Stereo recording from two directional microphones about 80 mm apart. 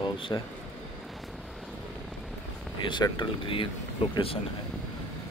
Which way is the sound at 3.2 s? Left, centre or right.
Left.